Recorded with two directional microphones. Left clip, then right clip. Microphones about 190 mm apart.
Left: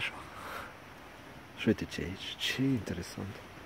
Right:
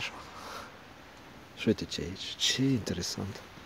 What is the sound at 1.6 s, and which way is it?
Speech, 5° right (ahead or behind).